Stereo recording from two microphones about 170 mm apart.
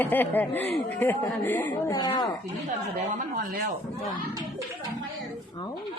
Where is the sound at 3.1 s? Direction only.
50° right (ahead or behind).